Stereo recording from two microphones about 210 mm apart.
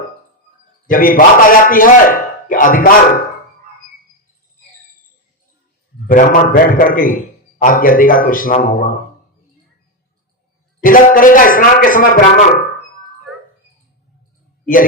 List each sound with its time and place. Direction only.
0.9 s speech: 40° left (ahead or behind)
6.1 s speech: 40° left (ahead or behind)
10.8 s speech: 40° left (ahead or behind)
14.6 s a sound: 40° left (ahead or behind)